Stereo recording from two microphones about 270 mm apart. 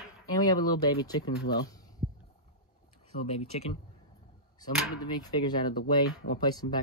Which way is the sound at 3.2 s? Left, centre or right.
Left.